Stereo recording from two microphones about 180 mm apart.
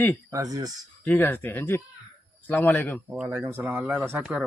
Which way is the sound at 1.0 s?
10° left (ahead or behind).